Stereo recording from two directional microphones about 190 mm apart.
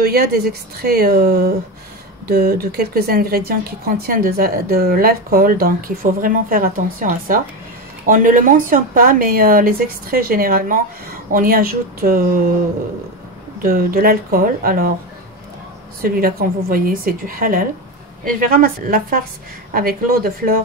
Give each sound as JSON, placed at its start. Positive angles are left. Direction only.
{"t": 0.0, "sound": "speech", "side_deg": -55}
{"t": 13.6, "sound": "speech", "side_deg": -50}
{"t": 16.0, "sound": "speech", "side_deg": -50}